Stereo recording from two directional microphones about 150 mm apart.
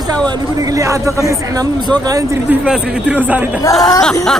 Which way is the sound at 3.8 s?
Centre (ahead or behind).